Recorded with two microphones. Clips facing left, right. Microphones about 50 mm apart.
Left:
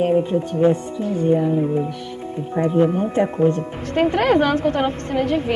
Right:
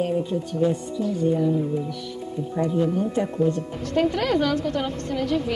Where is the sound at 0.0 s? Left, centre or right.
Left.